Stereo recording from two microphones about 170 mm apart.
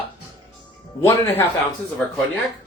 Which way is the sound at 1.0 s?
15° left (ahead or behind).